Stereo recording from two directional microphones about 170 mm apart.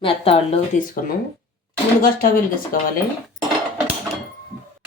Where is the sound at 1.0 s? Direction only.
50° left (ahead or behind).